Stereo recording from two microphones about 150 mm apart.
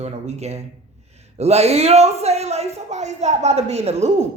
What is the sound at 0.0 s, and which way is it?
A woman's voice, 45° right (ahead or behind).